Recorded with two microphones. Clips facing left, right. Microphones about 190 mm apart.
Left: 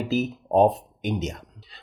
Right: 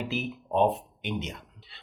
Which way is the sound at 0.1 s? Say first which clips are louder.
Left 11 dB; 40° left (ahead or behind).